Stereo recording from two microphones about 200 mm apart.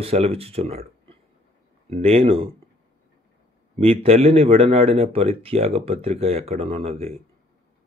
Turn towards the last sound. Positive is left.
turn(degrees=-30)  # may be behind; listen again after turning